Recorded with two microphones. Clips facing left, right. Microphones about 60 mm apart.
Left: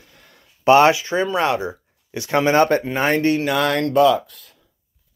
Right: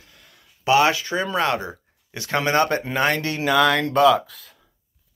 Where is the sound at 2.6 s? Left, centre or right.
Left.